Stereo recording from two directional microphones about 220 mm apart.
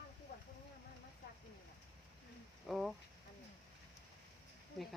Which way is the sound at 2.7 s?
Centre (ahead or behind).